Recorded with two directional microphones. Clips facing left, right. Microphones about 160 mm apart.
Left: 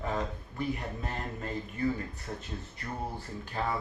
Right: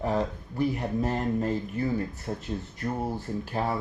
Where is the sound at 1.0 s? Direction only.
40° right (ahead or behind).